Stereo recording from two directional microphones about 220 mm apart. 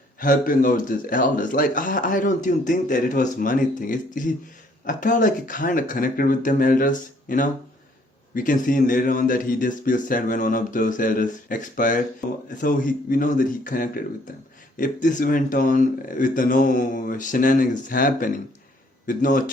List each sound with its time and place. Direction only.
0.2 s speech: 40° left (ahead or behind)